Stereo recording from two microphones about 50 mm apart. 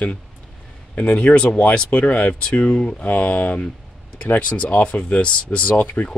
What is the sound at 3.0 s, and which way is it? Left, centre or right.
Speech, left.